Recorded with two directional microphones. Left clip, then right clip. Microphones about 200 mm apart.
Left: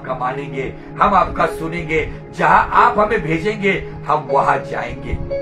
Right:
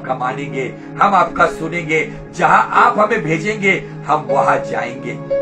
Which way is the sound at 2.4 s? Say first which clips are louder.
Right 1 dB; 10° left (ahead or behind).